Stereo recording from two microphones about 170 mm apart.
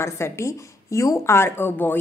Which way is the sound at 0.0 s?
15° left (ahead or behind).